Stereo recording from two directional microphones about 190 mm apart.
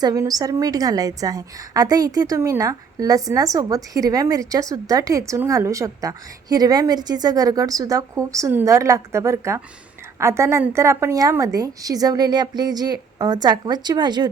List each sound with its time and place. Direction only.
0.0 s a woman's voice: 20° right (ahead or behind)